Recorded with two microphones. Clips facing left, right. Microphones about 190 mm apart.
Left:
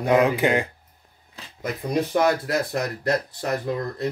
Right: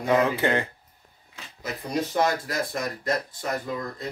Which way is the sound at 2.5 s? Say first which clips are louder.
Left 4 dB; 65° left (ahead or behind).